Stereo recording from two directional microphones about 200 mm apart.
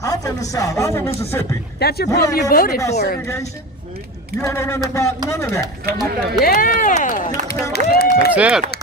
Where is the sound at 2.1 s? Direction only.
15° left (ahead or behind).